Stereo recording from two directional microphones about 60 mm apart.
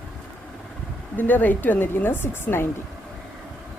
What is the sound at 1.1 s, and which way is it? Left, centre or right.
A woman's voice, left.